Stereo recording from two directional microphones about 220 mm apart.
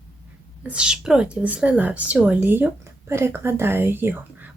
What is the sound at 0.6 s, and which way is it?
A woman's voice, 5° right (ahead or behind).